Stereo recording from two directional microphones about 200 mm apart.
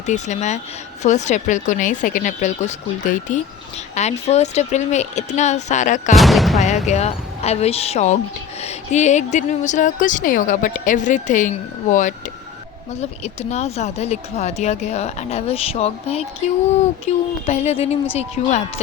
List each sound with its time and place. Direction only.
0.0 s a woman's voice: 35° left (ahead or behind)
6.1 s speech: centre (ahead or behind)
6.8 s a woman's voice: 35° left (ahead or behind)